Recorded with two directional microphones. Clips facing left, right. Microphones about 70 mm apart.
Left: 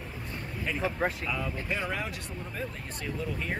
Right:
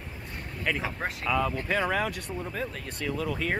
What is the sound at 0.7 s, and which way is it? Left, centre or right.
Speech, right.